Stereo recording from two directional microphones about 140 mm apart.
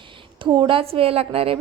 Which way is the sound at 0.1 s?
35° right (ahead or behind).